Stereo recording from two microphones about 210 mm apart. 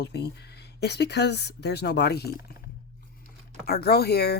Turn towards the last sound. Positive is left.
turn(degrees=50)  # may be behind; listen again after turning